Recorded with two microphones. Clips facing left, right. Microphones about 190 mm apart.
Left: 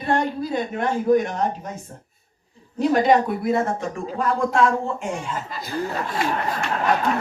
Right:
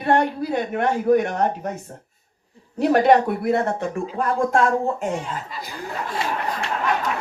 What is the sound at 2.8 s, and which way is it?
Speech, 65° right (ahead or behind).